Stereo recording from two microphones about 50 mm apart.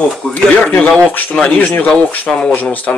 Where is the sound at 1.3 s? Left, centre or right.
Centre.